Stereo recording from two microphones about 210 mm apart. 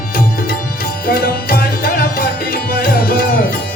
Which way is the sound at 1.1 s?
45° left (ahead or behind).